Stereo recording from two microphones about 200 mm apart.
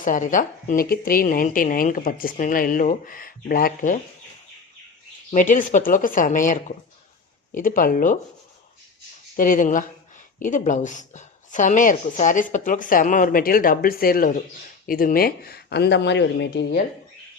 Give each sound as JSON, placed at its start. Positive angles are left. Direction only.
{"t": 0.0, "sound": "a woman's voice", "side_deg": 40}
{"t": 5.3, "sound": "a woman's voice", "side_deg": 40}
{"t": 9.3, "sound": "a woman's voice", "side_deg": 45}